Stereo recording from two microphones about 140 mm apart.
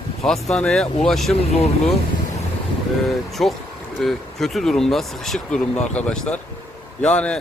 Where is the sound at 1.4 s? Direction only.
50° left (ahead or behind).